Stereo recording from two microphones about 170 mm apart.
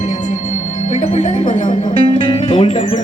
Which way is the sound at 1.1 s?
45° left (ahead or behind).